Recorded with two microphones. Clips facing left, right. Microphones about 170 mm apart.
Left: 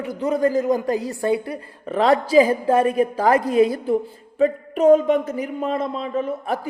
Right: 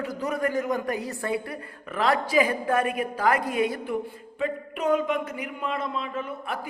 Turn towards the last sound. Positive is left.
turn(degrees=40)  # may be behind; listen again after turning